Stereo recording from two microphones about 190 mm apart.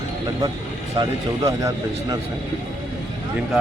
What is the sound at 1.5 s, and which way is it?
Speech, 20° right (ahead or behind).